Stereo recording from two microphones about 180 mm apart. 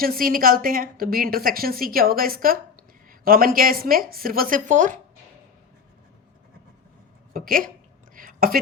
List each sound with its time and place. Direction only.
0.0 s a woman's voice: 55° right (ahead or behind)
7.3 s a woman's voice: 55° right (ahead or behind)
8.1 s a sound: 50° right (ahead or behind)